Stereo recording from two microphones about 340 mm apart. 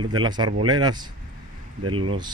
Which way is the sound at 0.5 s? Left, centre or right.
Right.